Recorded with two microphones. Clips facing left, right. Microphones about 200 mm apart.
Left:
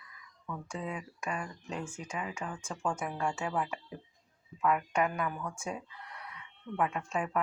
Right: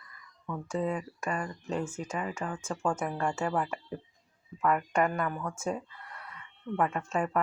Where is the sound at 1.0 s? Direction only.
Centre (ahead or behind).